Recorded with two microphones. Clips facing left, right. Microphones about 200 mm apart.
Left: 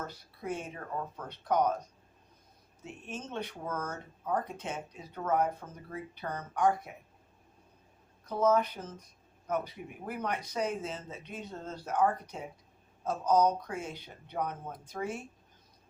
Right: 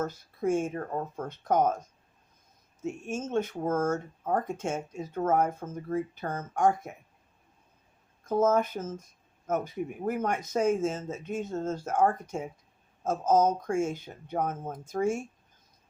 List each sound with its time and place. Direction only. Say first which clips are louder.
0.0 s speech: right 10 dB; 45° right (ahead or behind)
2.8 s speech: right 9 dB; 45° right (ahead or behind)
8.2 s speech: right 3 dB; 45° right (ahead or behind)